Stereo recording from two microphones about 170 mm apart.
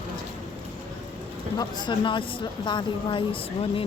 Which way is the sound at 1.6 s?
25° left (ahead or behind).